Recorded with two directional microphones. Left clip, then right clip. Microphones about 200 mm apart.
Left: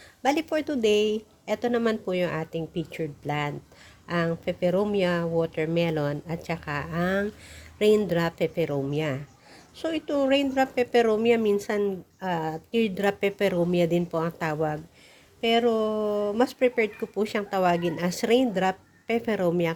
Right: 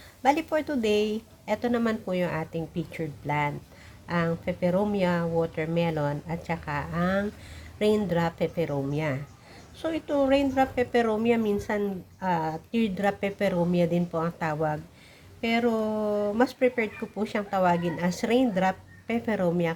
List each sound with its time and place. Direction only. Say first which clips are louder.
0.2 s a woman's voice: right 1 dB; 40° left (ahead or behind)